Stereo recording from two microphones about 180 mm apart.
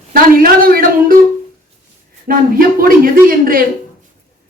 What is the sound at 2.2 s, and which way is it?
Speech, 55° right (ahead or behind).